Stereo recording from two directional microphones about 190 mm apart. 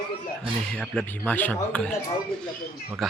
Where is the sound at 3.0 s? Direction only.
Centre (ahead or behind).